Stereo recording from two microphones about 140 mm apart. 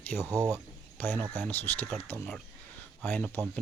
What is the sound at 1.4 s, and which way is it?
Speech, 15° left (ahead or behind).